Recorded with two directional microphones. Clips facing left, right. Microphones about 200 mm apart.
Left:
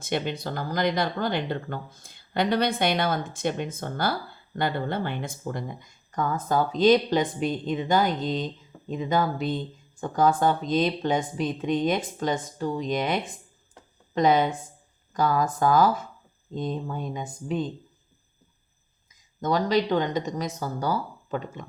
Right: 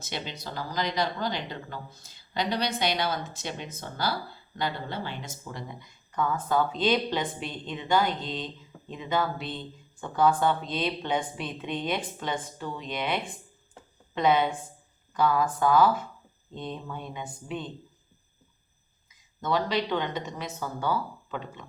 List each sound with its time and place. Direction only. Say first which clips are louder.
0.0 s speech: left 8 dB; 55° left (ahead or behind)
19.4 s speech: left 4 dB; 45° left (ahead or behind)